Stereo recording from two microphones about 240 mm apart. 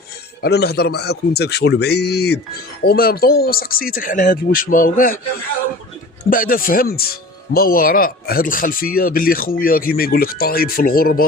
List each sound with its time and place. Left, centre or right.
0.4 s a man's voice: left
6.3 s speech: left